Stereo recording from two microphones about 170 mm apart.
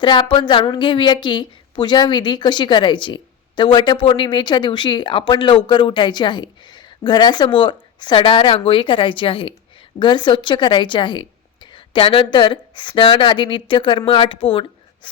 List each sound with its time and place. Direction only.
0.0 s a woman's voice: 30° left (ahead or behind)